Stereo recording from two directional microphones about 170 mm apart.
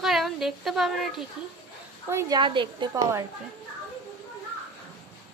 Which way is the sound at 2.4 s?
30° right (ahead or behind).